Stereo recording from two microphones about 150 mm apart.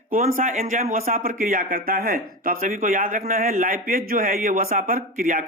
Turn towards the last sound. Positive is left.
turn(degrees=-65)  # may be behind; listen again after turning